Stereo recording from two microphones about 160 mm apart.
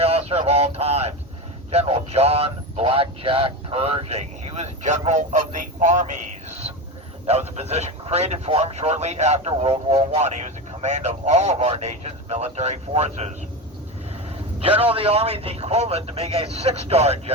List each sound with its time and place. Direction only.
0.0 s a sound: 40° right (ahead or behind)
1.7 s speech: 40° right (ahead or behind)
14.6 s a man's voice: 35° right (ahead or behind)